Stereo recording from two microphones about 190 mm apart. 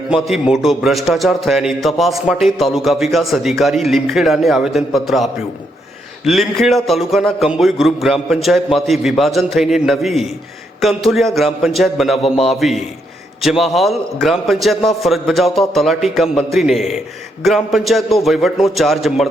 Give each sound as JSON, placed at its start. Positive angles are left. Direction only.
{"t": 0.1, "sound": "a man's voice", "side_deg": -5}